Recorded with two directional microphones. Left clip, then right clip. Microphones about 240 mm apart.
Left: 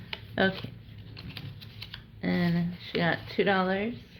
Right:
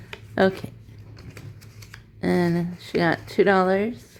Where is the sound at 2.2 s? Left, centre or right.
Right.